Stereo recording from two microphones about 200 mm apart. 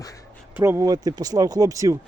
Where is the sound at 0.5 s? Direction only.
10° right (ahead or behind).